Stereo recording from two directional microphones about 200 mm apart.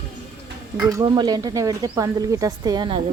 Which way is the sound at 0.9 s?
20° right (ahead or behind).